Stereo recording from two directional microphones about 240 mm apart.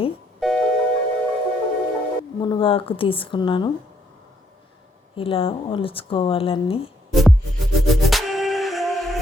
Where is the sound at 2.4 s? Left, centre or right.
Left.